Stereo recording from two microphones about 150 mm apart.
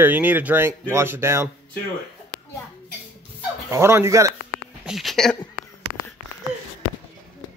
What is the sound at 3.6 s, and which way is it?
Speech, 20° right (ahead or behind).